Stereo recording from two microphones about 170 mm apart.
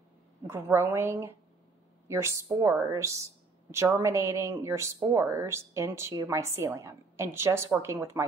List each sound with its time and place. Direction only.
0.5 s speech: 15° right (ahead or behind)